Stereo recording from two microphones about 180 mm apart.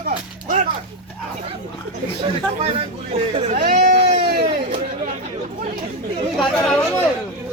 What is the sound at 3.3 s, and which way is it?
Speech, 35° right (ahead or behind).